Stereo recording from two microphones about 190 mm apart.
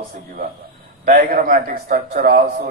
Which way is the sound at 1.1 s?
50° right (ahead or behind).